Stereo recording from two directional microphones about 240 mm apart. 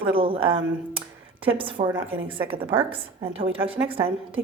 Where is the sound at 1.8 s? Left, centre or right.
Centre.